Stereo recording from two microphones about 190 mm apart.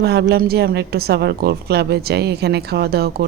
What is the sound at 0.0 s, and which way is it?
A woman's voice, 60° right (ahead or behind).